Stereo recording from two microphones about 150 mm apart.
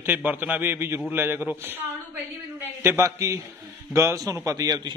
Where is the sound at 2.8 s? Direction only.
20° right (ahead or behind).